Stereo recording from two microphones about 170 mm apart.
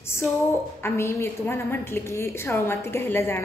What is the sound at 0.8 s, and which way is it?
A woman's voice, 15° left (ahead or behind).